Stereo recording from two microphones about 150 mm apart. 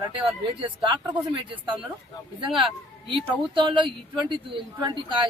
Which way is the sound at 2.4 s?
35° right (ahead or behind).